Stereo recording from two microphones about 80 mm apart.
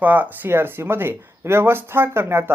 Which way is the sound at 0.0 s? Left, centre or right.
Right.